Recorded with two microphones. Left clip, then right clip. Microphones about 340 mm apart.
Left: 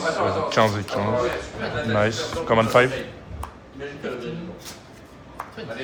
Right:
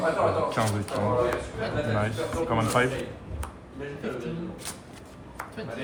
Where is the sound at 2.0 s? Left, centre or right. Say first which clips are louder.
Left 5 dB; left.